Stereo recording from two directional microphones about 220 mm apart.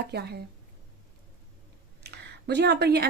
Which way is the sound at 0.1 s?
45° right (ahead or behind).